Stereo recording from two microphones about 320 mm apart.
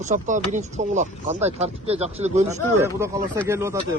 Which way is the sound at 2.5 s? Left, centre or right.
Centre.